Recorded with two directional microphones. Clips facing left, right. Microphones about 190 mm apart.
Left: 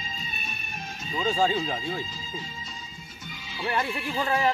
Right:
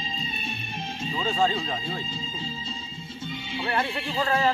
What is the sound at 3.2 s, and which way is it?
Music, 30° right (ahead or behind).